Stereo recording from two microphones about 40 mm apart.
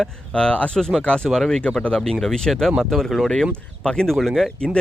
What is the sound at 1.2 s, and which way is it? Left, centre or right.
Speech, centre.